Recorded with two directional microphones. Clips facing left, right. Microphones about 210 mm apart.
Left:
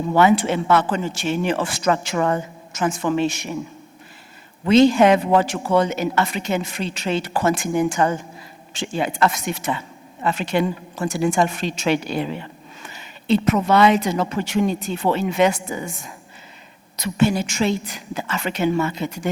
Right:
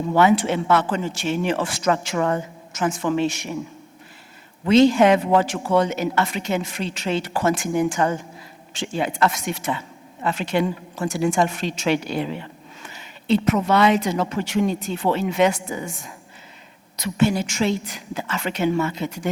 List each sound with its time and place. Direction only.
0.2 s speech: 10° left (ahead or behind)
4.7 s speech: 10° left (ahead or behind)
10.7 s speech: 20° left (ahead or behind)
11.1 s a woman's voice: 10° left (ahead or behind)